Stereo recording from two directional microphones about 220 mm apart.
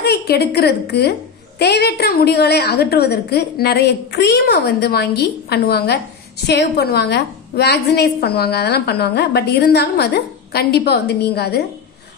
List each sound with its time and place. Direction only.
0.0 s a woman's voice: 50° left (ahead or behind)